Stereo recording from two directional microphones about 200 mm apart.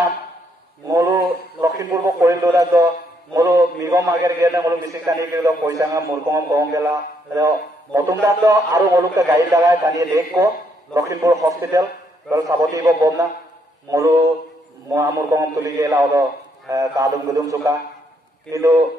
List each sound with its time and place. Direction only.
0.8 s radio: 15° right (ahead or behind)
3.3 s a man's voice: 15° right (ahead or behind)